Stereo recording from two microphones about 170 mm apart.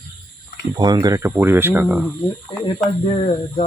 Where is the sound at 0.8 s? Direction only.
25° right (ahead or behind).